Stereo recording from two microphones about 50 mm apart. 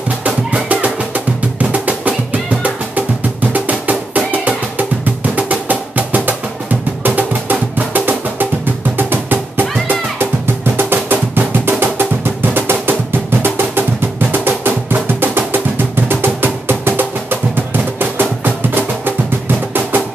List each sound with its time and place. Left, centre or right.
0.2 s music: right
14.3 s music: right